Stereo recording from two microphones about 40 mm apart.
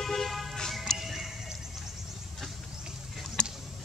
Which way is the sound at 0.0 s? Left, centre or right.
Centre.